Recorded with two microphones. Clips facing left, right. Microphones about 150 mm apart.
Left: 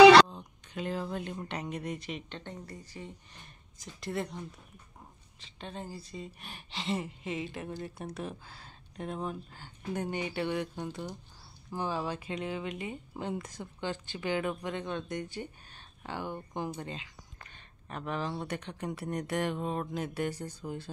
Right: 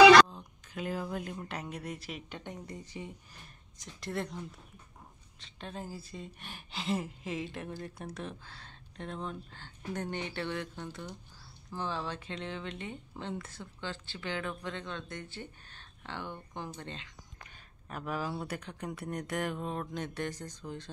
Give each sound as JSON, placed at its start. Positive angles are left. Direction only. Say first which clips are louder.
{"t": 0.3, "sound": "a sound", "louder": "left 2 dB", "side_deg": 0}
{"t": 1.5, "sound": "speech", "louder": "left 3 dB", "side_deg": 0}
{"t": 3.4, "sound": "speech", "louder": "left 3 dB", "side_deg": 0}
{"t": 17.8, "sound": "speech", "louder": "left 1 dB", "side_deg": -5}